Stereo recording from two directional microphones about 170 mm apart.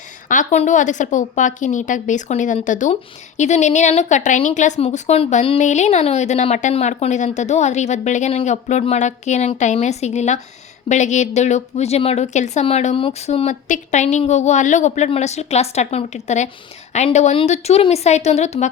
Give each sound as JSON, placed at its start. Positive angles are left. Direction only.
{"t": 0.3, "sound": "a woman's voice", "side_deg": 45}